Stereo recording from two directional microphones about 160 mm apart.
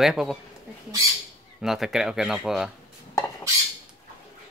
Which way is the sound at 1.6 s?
5° right (ahead or behind).